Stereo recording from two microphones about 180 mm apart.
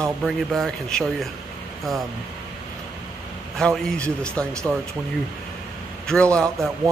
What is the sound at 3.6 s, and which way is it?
Speech, 5° left (ahead or behind).